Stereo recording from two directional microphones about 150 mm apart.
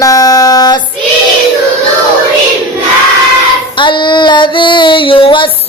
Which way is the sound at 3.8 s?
30° left (ahead or behind).